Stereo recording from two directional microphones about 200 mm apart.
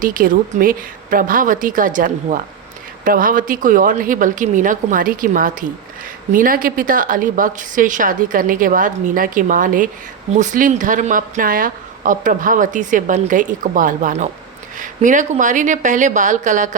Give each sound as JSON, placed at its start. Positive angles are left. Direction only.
{"t": 0.0, "sound": "a woman's voice", "side_deg": -45}